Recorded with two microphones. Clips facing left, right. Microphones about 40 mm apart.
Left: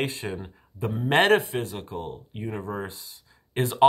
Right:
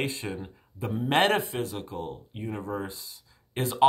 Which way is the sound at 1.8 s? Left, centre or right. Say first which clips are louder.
Left 1 dB; left.